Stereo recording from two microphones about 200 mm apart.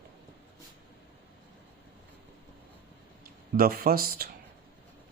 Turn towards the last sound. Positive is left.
turn(degrees=-45)  # may be behind; listen again after turning